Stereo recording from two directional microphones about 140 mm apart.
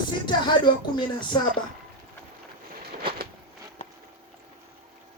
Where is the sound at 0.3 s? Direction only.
35° left (ahead or behind).